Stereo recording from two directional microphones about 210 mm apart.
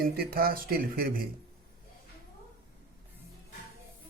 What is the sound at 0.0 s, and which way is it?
Speech, 45° right (ahead or behind).